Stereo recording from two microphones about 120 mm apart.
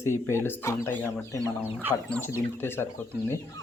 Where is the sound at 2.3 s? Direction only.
20° left (ahead or behind).